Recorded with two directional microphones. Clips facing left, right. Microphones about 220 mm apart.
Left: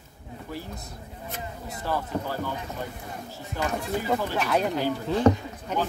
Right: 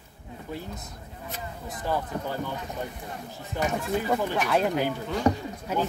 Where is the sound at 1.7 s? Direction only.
15° right (ahead or behind).